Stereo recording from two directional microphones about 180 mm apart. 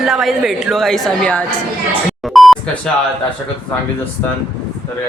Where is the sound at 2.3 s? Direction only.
Centre (ahead or behind).